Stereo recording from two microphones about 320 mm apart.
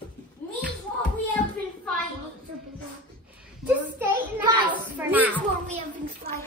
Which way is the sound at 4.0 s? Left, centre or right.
Centre.